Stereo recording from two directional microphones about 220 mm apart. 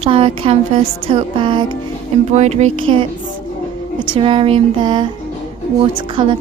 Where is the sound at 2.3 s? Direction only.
30° right (ahead or behind).